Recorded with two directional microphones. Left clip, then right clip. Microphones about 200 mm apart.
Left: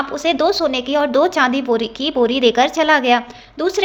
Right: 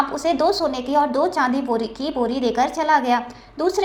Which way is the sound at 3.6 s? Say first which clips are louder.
Left 2 dB; 25° left (ahead or behind).